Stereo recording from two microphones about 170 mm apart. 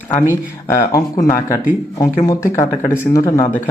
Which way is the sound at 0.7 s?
20° left (ahead or behind).